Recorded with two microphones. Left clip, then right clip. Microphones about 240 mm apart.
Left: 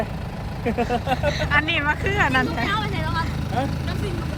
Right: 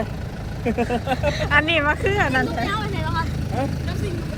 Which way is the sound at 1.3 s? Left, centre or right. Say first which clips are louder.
Right 3 dB; centre.